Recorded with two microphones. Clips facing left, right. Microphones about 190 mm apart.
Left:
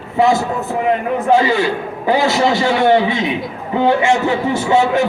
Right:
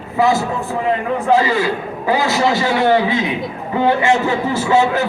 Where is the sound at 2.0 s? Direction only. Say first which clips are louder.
Left 2 dB; 25° left (ahead or behind).